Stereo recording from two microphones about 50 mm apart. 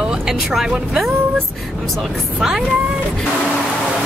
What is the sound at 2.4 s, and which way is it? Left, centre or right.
Speech, centre.